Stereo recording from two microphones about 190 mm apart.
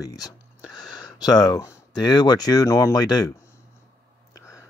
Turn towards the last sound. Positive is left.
turn(degrees=15)  # may be behind; listen again after turning